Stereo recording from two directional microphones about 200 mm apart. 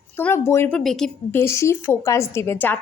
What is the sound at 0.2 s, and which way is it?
Speech, 10° left (ahead or behind).